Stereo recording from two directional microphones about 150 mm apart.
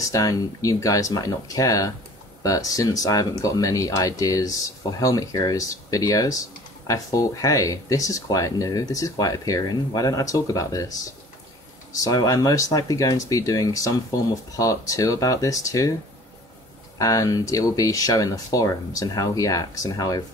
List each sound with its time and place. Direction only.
0.1 s speech: 25° left (ahead or behind)
12.0 s speech: 25° left (ahead or behind)
17.0 s speech: 25° left (ahead or behind)